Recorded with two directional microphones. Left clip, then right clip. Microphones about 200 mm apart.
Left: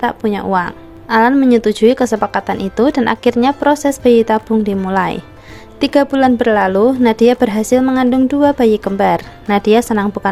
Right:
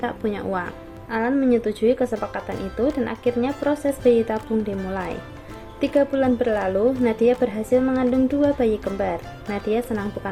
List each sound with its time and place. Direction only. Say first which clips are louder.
0.0 s speech: left 9 dB; 40° left (ahead or behind)